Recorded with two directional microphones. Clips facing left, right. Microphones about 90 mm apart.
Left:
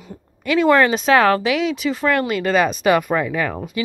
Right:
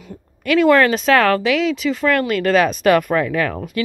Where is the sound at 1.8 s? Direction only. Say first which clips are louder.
Right 1 dB; 30° left (ahead or behind).